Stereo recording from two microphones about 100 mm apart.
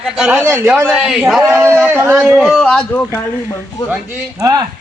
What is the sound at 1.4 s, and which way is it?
Speech, 25° right (ahead or behind).